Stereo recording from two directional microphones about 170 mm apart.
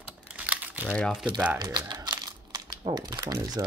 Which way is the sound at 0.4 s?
10° right (ahead or behind).